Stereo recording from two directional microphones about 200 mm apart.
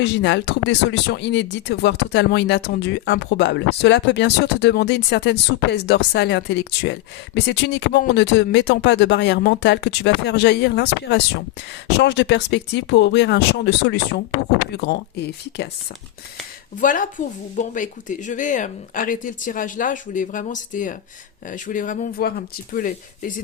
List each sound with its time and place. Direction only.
0.0 s speech: 60° left (ahead or behind)
16.8 s speech: 40° left (ahead or behind)